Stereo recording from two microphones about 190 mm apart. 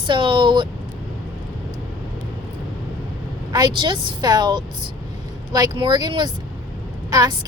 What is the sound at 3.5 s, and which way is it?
Speech, 25° right (ahead or behind).